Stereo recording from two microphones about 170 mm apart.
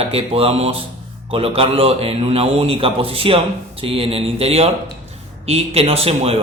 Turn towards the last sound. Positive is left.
turn(degrees=-35)  # may be behind; listen again after turning